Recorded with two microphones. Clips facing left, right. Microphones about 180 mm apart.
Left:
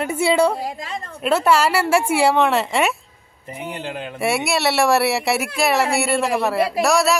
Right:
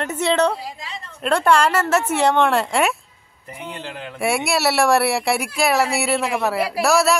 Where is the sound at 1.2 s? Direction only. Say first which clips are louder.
Even; 5° left (ahead or behind).